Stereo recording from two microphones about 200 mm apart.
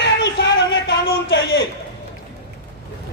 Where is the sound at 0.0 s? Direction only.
60° left (ahead or behind).